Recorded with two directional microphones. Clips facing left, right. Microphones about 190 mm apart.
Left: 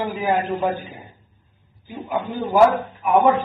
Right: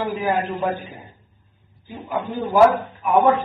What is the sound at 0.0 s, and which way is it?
A man's voice, centre (ahead or behind).